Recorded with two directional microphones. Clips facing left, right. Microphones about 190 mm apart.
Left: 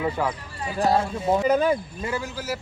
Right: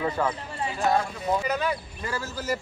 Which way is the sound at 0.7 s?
30° left (ahead or behind).